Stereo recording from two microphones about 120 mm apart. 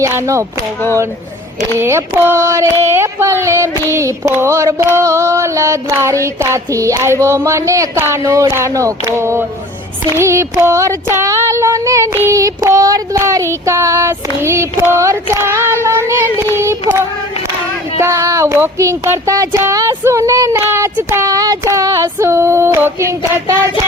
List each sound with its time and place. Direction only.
0.0 s child singing: 25° right (ahead or behind)
1.8 s child singing: 20° right (ahead or behind)
18.0 s child singing: 25° right (ahead or behind)